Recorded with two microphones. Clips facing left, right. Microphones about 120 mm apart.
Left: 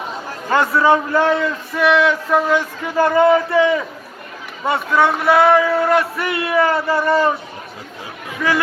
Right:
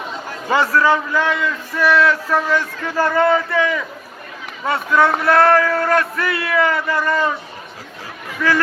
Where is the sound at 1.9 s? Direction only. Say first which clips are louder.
Left 1 dB; 15° left (ahead or behind).